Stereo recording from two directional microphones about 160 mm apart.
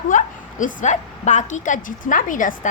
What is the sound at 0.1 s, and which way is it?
A woman's voice, 55° left (ahead or behind).